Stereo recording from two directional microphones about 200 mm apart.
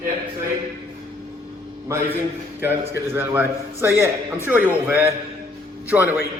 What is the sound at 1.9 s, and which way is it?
Speech, 10° right (ahead or behind).